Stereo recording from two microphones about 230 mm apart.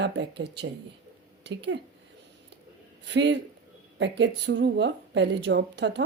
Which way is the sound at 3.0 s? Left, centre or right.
Right.